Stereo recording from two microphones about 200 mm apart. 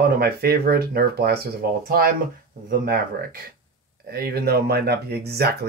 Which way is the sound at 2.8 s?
45° right (ahead or behind).